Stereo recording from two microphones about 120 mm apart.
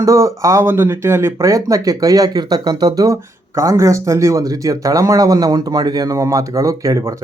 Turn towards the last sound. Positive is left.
turn(degrees=-25)  # may be behind; listen again after turning